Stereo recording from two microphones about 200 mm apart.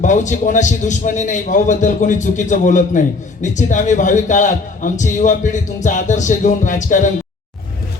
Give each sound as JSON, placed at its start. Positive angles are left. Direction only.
{"t": 0.0, "sound": "a man's voice", "side_deg": 40}